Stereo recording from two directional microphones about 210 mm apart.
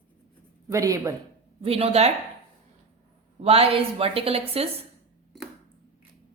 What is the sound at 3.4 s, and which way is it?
A woman's voice, 30° right (ahead or behind).